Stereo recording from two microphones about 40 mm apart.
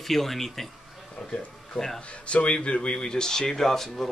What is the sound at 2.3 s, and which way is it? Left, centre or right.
A man's voice, left.